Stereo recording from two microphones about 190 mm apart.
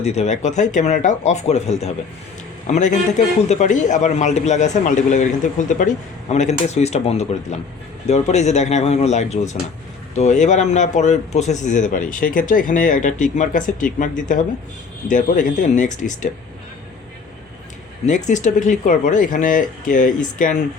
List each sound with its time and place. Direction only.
0.0 s a man's voice: 35° left (ahead or behind)
18.0 s speech: 40° left (ahead or behind)